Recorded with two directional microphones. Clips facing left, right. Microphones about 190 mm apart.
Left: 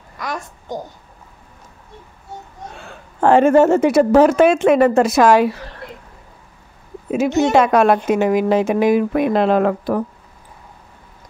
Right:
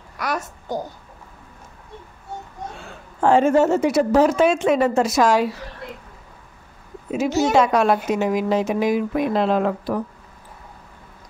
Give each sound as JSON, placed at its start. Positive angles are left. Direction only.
{"t": 0.2, "sound": "a child's voice", "side_deg": -5}
{"t": 3.2, "sound": "speech", "side_deg": 60}
{"t": 7.5, "sound": "speech", "side_deg": 60}